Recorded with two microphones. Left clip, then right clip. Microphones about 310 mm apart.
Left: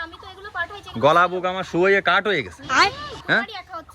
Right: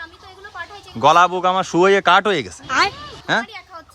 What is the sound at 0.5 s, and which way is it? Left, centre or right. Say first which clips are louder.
Speech: left 4 dB; centre.